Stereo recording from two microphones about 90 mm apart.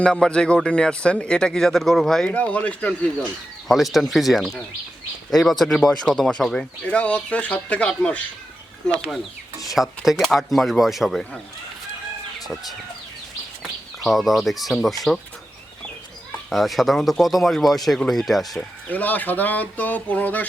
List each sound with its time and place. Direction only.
0.0 s a man's voice: 10° left (ahead or behind)
2.2 s a man's voice: 15° left (ahead or behind)
3.7 s a man's voice: centre (ahead or behind)
9.0 s speech: 5° left (ahead or behind)
13.6 s speech: centre (ahead or behind)
16.5 s speech: centre (ahead or behind)
18.9 s a man's voice: 20° left (ahead or behind)